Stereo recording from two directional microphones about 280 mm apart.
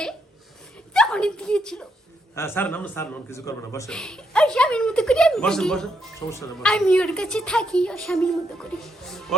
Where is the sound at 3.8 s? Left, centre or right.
Centre.